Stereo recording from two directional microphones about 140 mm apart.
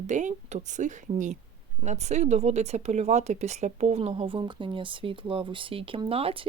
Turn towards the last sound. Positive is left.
turn(degrees=-45)  # may be behind; listen again after turning